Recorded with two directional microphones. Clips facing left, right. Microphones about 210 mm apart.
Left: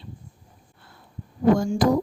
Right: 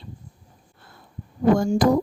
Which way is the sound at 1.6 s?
50° right (ahead or behind).